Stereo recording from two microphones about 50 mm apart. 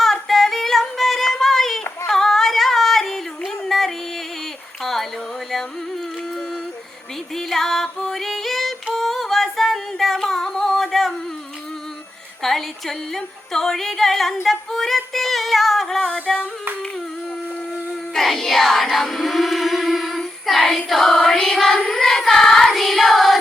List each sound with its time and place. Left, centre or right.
0.0 s singing: centre
2.0 s yodeling: centre
3.4 s music: centre
4.8 s a sound: centre
7.3 s music: centre
12.4 s music: centre
14.4 s female singing: centre
16.0 s music: centre
18.1 s music: centre
21.8 s child singing: centre